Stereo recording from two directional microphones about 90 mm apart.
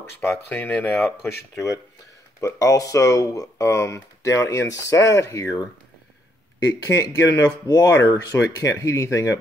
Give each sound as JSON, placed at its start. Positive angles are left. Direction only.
{"t": 0.2, "sound": "speech", "side_deg": 25}
{"t": 2.4, "sound": "speech", "side_deg": 35}
{"t": 6.7, "sound": "speech", "side_deg": 45}